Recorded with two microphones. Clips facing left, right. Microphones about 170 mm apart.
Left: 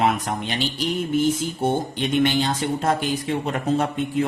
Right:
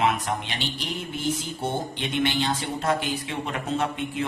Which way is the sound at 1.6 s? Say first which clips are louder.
Left 8 dB; 45° left (ahead or behind).